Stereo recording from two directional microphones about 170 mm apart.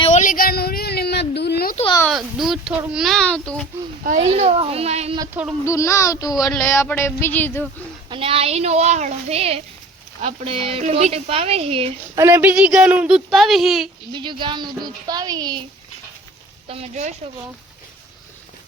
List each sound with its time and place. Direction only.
0.1 s a sound: 50° left (ahead or behind); by 1.7 s 75° left (ahead or behind)
2.1 s speech: centre (ahead or behind)
4.0 s speech: 45° right (ahead or behind)
5.3 s speech: 10° right (ahead or behind)
5.6 s speech: 15° left (ahead or behind)
8.1 s speech: 35° right (ahead or behind)
12.1 s speech: 15° right (ahead or behind)
14.1 s speech: 30° right (ahead or behind)
16.6 s speech: 35° right (ahead or behind)